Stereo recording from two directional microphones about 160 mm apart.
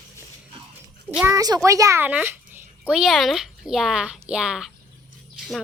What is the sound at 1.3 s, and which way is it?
A child's voice, 25° right (ahead or behind).